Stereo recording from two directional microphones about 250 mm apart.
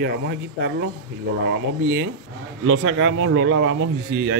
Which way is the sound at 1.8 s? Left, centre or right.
Right.